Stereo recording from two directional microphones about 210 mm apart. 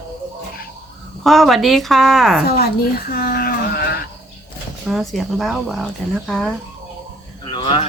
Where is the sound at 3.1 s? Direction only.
45° left (ahead or behind).